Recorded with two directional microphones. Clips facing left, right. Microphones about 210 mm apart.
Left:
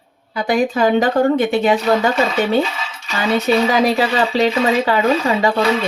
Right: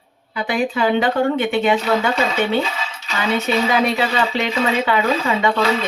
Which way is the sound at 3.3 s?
35° left (ahead or behind).